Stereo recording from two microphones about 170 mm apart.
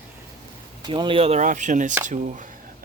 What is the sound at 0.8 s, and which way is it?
Speech, 30° right (ahead or behind).